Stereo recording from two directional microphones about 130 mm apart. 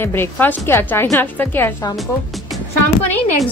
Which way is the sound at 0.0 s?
15° left (ahead or behind).